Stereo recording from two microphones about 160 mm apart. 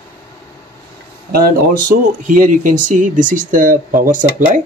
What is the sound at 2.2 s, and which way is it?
Speech, 55° right (ahead or behind).